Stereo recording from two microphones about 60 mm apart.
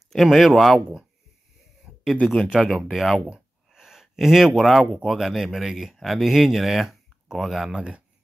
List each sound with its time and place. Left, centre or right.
0.1 s speech: centre
1.9 s a sound: centre
2.4 s speech: centre